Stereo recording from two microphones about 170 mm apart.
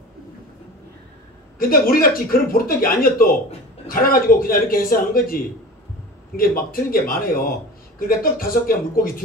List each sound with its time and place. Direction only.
1.6 s speech: 60° left (ahead or behind)